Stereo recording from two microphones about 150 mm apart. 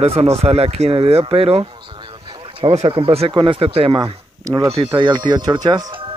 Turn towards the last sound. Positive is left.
turn(degrees=-30)  # may be behind; listen again after turning